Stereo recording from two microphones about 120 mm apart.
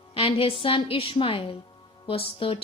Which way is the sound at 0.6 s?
50° left (ahead or behind).